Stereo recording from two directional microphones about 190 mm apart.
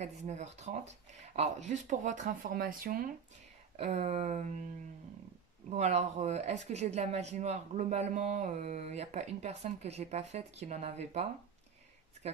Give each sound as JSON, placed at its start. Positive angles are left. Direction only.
{"t": 0.0, "sound": "speech", "side_deg": -35}
{"t": 3.7, "sound": "speech", "side_deg": -35}
{"t": 5.7, "sound": "speech", "side_deg": -35}